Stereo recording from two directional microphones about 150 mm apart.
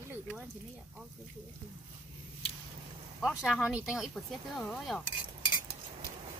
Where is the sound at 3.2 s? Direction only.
Centre (ahead or behind).